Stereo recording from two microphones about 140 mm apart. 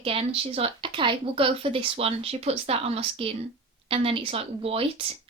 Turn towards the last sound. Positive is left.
turn(degrees=-45)  # may be behind; listen again after turning